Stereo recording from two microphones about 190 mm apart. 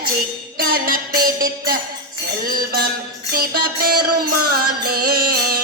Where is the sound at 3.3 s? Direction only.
50° right (ahead or behind).